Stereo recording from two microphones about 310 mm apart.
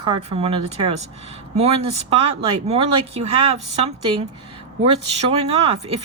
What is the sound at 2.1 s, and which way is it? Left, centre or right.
Speech, centre.